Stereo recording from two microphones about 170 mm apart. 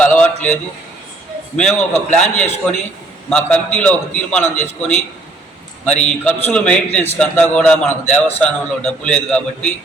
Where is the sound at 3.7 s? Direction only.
10° left (ahead or behind).